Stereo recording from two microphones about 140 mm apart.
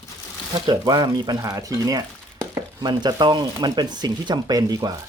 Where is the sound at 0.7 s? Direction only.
30° right (ahead or behind).